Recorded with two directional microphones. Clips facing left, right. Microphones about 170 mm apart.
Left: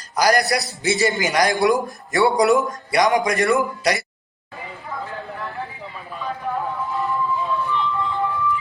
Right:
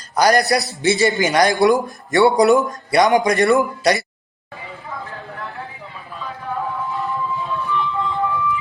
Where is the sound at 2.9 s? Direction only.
35° right (ahead or behind).